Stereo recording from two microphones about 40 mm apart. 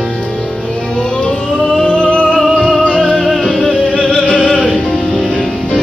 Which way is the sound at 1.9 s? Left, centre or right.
Left.